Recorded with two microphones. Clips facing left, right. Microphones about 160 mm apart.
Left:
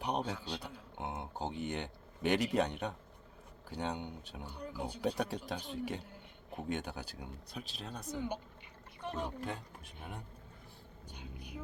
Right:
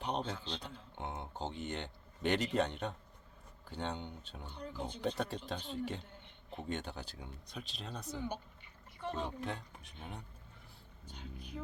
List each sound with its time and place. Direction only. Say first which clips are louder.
0.0 s speech: left 2 dB; 10° left (ahead or behind)
9.0 s speech: even; 15° left (ahead or behind)
11.0 s speech: even; 15° left (ahead or behind)